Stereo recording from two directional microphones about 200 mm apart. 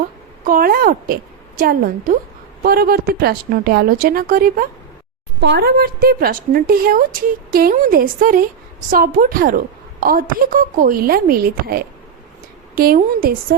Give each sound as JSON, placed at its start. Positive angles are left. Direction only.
{"t": 0.4, "sound": "a woman's voice", "side_deg": -45}